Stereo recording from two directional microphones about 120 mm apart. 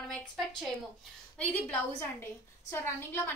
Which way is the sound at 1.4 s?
15° left (ahead or behind).